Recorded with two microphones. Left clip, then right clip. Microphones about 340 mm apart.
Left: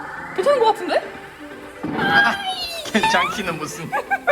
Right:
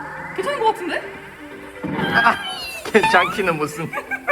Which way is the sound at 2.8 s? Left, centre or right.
Centre.